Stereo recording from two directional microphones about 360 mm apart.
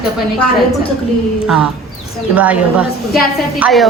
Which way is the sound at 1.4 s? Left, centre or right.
Centre.